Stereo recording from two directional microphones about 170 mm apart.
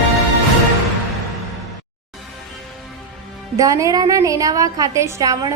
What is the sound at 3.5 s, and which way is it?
A woman's voice, 20° right (ahead or behind).